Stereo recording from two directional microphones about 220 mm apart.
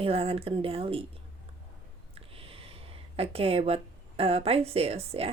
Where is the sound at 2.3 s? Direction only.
25° right (ahead or behind).